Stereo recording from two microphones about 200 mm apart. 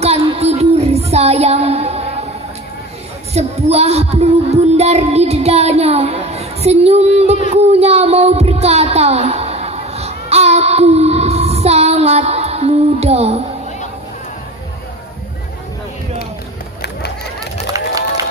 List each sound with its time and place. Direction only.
0.0 s music: 30° right (ahead or behind)
3.3 s child singing: 30° right (ahead or behind)
7.5 s speech: 30° right (ahead or behind)
17.7 s a sound: 15° right (ahead or behind)